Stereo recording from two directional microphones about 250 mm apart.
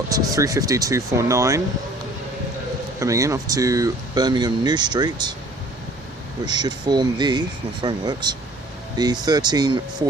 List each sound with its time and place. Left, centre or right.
0.1 s speech: centre
3.0 s speech: centre
6.4 s speech: centre